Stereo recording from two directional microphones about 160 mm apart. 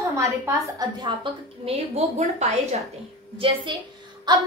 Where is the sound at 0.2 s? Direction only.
20° right (ahead or behind).